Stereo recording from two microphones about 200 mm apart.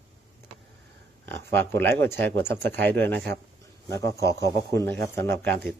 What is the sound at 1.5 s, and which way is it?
Speech, 10° left (ahead or behind).